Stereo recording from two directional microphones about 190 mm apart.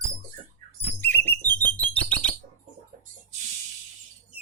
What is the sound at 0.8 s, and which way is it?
Bird, 10° left (ahead or behind).